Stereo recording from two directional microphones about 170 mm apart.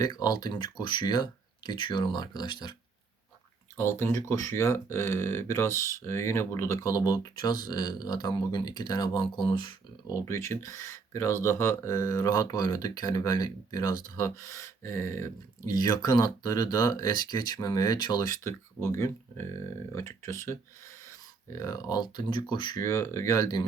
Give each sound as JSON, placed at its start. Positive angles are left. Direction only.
{"t": 0.0, "sound": "speech", "side_deg": 25}
{"t": 3.8, "sound": "speech", "side_deg": 15}
{"t": 10.2, "sound": "speech", "side_deg": 15}
{"t": 22.8, "sound": "speech", "side_deg": 15}